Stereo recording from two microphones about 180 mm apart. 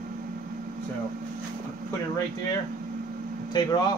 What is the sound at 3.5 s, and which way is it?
Speech, 20° left (ahead or behind).